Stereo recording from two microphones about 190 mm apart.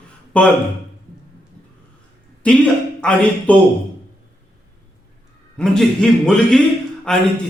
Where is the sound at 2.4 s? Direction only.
5° left (ahead or behind).